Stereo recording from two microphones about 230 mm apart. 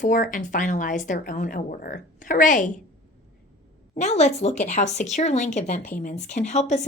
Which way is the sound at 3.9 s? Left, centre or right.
Left.